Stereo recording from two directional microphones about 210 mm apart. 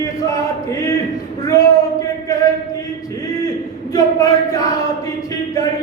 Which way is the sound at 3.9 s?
15° left (ahead or behind).